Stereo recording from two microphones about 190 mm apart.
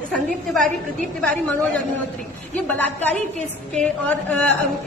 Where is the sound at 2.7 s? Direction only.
10° left (ahead or behind).